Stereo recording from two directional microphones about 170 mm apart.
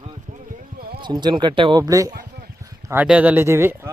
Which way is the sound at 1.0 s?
25° right (ahead or behind).